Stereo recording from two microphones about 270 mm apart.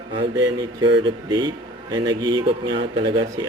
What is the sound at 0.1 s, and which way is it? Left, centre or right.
A man's voice, centre.